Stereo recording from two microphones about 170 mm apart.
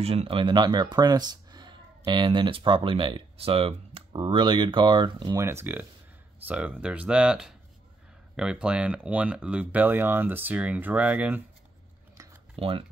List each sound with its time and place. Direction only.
0.0 s speech: 35° right (ahead or behind); by 11.4 s 10° right (ahead or behind)
12.5 s cutlery: 35° right (ahead or behind)